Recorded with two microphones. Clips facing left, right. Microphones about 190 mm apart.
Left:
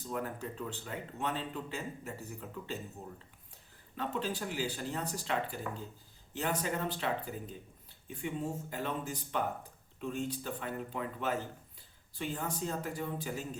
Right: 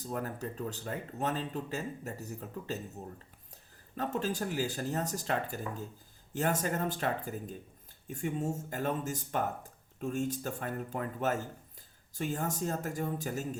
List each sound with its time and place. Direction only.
0.1 s speech: 40° right (ahead or behind)
3.9 s speech: 45° right (ahead or behind)